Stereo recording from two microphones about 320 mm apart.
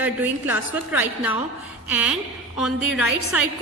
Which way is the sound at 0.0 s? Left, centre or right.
Centre.